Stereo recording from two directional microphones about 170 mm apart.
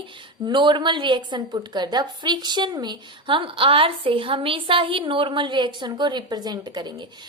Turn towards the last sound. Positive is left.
turn(degrees=-25)  # may be behind; listen again after turning